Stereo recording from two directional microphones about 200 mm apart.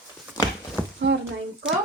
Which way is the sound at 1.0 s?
60° right (ahead or behind).